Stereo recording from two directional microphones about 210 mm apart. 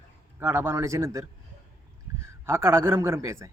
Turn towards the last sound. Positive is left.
turn(degrees=-15)  # may be behind; listen again after turning